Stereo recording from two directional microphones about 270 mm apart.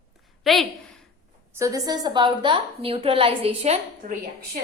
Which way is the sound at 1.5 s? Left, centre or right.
Centre.